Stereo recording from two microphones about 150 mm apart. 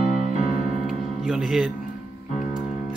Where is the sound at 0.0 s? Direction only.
40° right (ahead or behind).